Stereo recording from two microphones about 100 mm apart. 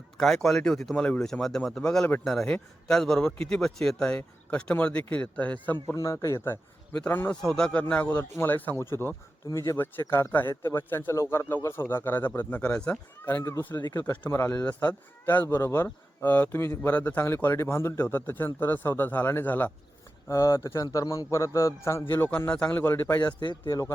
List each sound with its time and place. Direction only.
0.2 s a man's voice: 5° left (ahead or behind)
5.9 s a man's voice: 30° left (ahead or behind)
7.4 s a man's voice: 5° left (ahead or behind); by 9.7 s 30° left (ahead or behind)
9.7 s a man's voice: 20° left (ahead or behind)
20.2 s a man's voice: 30° left (ahead or behind)
23.2 s speech: 50° left (ahead or behind)
23.6 s speech: 35° left (ahead or behind)